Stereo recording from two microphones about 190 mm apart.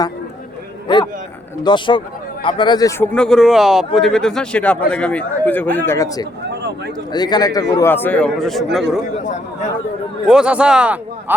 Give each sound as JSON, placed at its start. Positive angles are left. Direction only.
{"t": 0.9, "sound": "a sound", "side_deg": 25}
{"t": 1.6, "sound": "a man's voice", "side_deg": 25}
{"t": 3.1, "sound": "a man's voice", "side_deg": 5}
{"t": 6.5, "sound": "a sound", "side_deg": -65}
{"t": 7.1, "sound": "a man's voice", "side_deg": 20}
{"t": 10.2, "sound": "speech", "side_deg": -5}